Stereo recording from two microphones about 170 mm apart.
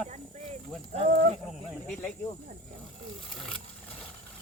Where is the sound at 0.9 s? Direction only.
35° right (ahead or behind).